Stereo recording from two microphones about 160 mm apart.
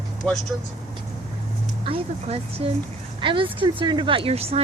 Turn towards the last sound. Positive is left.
turn(degrees=-40)  # may be behind; listen again after turning